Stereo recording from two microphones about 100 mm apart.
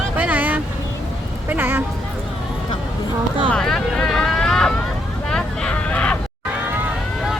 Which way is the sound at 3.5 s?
5° left (ahead or behind).